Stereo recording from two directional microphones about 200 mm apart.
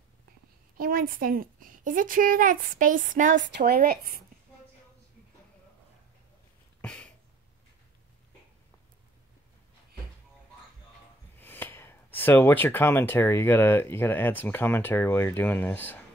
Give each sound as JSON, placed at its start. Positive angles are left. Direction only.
{"t": 0.7, "sound": "a woman's voice", "side_deg": -45}
{"t": 6.8, "sound": "a sound", "side_deg": 5}
{"t": 11.3, "sound": "speech", "side_deg": 10}